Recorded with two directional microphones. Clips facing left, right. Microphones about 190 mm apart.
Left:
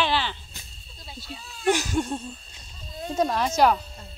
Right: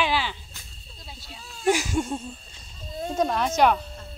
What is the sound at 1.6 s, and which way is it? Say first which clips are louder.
Speech: even; 10° right (ahead or behind).